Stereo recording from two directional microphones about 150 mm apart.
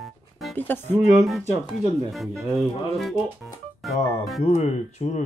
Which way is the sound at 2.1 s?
Centre (ahead or behind).